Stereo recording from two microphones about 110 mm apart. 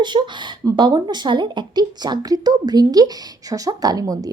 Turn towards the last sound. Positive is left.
turn(degrees=-35)  # may be behind; listen again after turning